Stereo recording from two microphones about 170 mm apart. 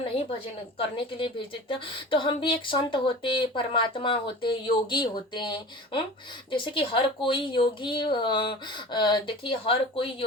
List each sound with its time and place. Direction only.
0.8 s a woman's voice: 30° left (ahead or behind)